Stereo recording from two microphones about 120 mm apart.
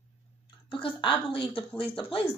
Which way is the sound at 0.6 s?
45° left (ahead or behind).